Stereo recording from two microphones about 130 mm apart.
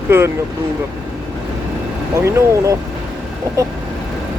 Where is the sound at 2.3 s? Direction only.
25° right (ahead or behind).